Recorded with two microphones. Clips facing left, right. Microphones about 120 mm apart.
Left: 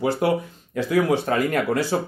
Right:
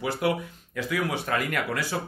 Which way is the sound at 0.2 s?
35° left (ahead or behind).